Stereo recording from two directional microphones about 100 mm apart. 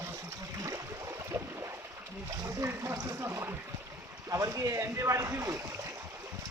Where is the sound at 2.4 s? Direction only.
30° right (ahead or behind).